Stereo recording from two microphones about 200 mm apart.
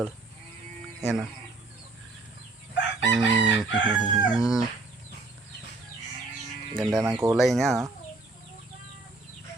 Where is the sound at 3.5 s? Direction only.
20° right (ahead or behind).